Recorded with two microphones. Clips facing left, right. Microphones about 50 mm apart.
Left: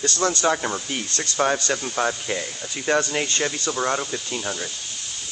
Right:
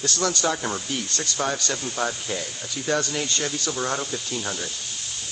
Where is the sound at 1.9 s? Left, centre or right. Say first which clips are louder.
Left 2 dB; centre.